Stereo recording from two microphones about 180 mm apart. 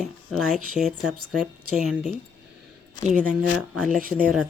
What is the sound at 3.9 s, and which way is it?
Speech, 50° right (ahead or behind).